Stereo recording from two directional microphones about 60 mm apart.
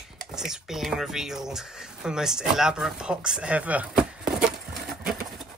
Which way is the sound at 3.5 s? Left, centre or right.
Right.